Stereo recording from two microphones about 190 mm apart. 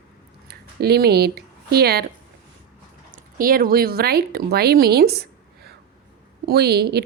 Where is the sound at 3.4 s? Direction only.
50° right (ahead or behind).